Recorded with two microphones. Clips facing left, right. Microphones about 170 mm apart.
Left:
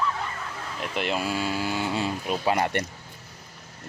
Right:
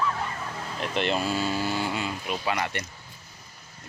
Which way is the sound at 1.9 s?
35° left (ahead or behind).